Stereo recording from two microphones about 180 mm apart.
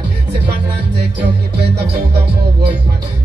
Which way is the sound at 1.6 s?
65° right (ahead or behind).